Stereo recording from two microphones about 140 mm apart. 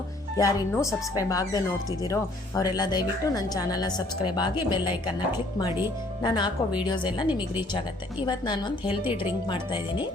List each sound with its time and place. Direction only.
0.3 s a woman's voice: 20° left (ahead or behind)
6.2 s speech: 30° left (ahead or behind)
8.3 s speech: 35° left (ahead or behind)